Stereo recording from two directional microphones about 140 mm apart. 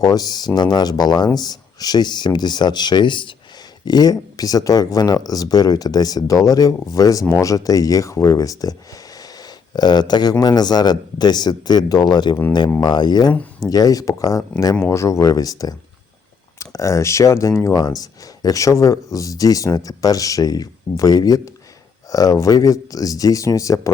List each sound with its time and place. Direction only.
0.0 s speech: 30° left (ahead or behind)